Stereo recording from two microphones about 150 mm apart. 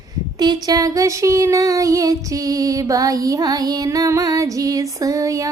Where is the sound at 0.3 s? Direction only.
25° right (ahead or behind).